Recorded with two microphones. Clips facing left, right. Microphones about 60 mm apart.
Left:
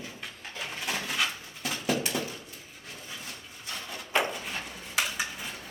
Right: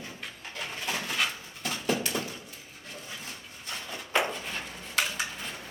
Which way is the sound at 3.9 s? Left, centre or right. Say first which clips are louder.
Even; centre.